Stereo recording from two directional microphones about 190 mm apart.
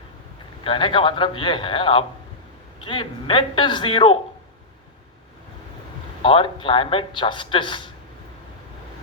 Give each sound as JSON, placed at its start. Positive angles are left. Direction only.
{"t": 0.6, "sound": "a man's voice", "side_deg": 25}
{"t": 6.2, "sound": "a man's voice", "side_deg": 25}